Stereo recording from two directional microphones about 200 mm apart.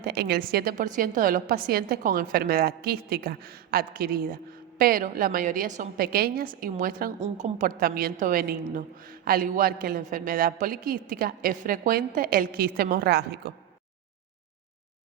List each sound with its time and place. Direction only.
0.0 s a woman's voice: 50° right (ahead or behind)